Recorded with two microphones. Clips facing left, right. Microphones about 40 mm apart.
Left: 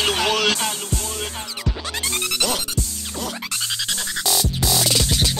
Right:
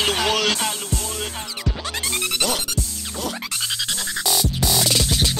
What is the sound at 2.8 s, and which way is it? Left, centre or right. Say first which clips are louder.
Music: left 1 dB; right.